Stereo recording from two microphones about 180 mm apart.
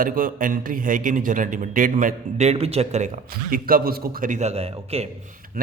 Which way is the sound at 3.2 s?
55° right (ahead or behind).